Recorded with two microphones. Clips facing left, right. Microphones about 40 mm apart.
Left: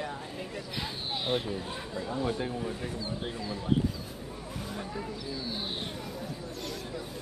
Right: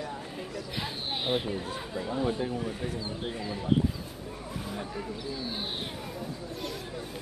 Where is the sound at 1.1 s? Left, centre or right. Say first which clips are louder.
Right 1 dB; centre.